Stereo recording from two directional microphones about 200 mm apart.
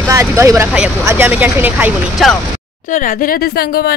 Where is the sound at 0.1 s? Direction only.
15° right (ahead or behind).